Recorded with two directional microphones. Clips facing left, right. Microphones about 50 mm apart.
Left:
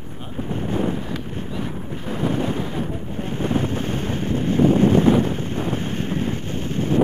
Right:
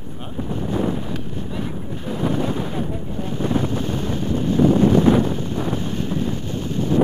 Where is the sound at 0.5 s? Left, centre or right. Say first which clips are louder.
Right 1 dB; left.